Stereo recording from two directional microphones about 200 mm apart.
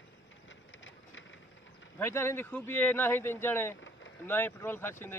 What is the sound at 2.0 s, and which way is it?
Speech, 10° left (ahead or behind).